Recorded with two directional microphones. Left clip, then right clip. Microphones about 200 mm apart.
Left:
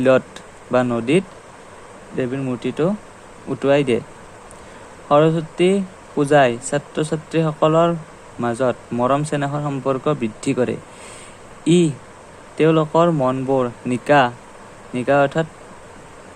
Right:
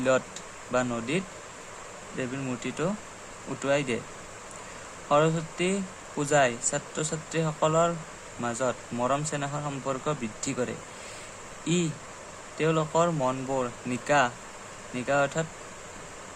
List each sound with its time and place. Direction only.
0.7 s speech: 35° left (ahead or behind)
5.0 s speech: 30° left (ahead or behind)